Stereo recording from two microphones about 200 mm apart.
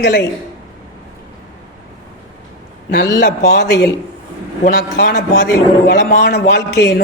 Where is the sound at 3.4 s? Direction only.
55° left (ahead or behind).